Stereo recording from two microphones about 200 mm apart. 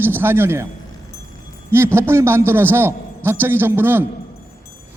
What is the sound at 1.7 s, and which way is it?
A man's voice, 10° right (ahead or behind).